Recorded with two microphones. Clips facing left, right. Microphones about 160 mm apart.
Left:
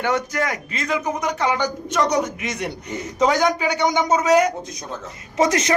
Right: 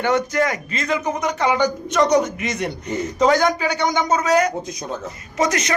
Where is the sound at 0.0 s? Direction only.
5° left (ahead or behind).